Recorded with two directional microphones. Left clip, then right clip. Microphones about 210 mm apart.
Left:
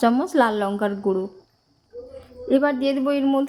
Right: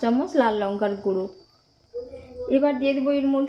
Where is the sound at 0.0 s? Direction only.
40° left (ahead or behind).